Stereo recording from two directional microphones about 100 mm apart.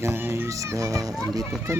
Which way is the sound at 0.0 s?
25° right (ahead or behind).